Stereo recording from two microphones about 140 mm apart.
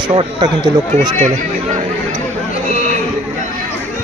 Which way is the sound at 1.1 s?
60° right (ahead or behind).